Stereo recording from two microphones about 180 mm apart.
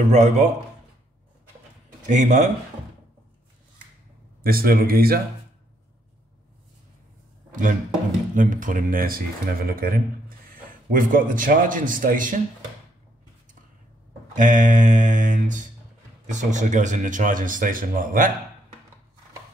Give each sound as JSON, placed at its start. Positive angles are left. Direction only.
{"t": 0.1, "sound": "speech", "side_deg": -40}
{"t": 2.0, "sound": "speech", "side_deg": -40}
{"t": 4.4, "sound": "speech", "side_deg": -55}
{"t": 8.4, "sound": "speech", "side_deg": -45}
{"t": 14.3, "sound": "speech", "side_deg": -45}